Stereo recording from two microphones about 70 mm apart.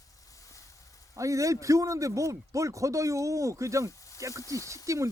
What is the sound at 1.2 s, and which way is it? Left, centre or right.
A man's voice, right.